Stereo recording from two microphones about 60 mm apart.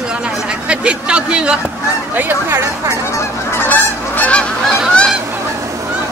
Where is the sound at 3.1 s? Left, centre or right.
Left.